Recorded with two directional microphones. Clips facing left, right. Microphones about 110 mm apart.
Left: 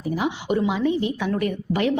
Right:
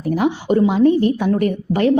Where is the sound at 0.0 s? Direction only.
55° right (ahead or behind).